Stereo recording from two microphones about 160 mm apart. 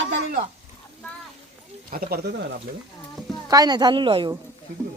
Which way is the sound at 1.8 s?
65° right (ahead or behind).